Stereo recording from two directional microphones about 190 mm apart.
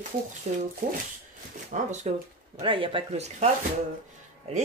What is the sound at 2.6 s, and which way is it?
Speech, 30° right (ahead or behind).